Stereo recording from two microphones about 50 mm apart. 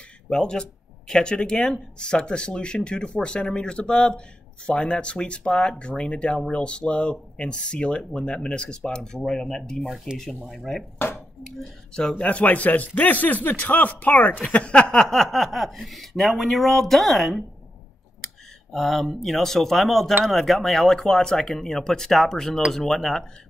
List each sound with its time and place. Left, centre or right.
0.3 s speech: centre
10.1 s speech: centre
11.9 s a man's voice: centre
12.2 s a man's voice: left
14.5 s speech: left; by 23.2 s centre